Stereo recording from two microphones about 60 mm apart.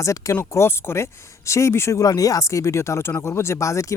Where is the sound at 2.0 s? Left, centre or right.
Left.